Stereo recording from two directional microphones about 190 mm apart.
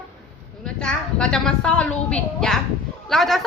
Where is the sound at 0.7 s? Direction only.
5° left (ahead or behind).